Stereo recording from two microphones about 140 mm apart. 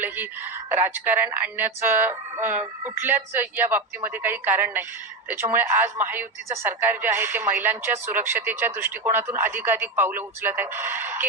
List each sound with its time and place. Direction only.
0.0 s a woman's voice: 15° right (ahead or behind)